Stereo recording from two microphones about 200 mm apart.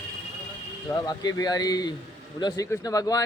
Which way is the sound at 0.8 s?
20° left (ahead or behind).